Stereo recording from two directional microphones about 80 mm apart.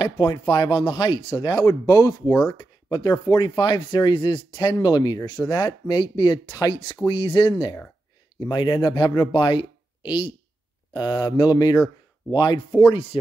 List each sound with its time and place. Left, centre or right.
0.0 s speech: left
2.5 s speech: left
4.8 s speech: left
7.1 s speech: left
10.9 s speech: left
12.3 s speech: left
13.1 s speech: left